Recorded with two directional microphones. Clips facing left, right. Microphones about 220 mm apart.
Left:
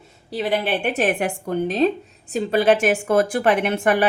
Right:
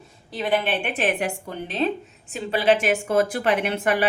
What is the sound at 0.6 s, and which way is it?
A woman's voice, 45° left (ahead or behind).